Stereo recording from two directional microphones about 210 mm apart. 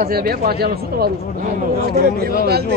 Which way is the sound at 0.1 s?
45° right (ahead or behind).